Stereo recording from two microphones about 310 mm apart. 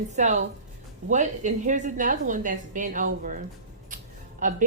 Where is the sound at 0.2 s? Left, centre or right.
Right.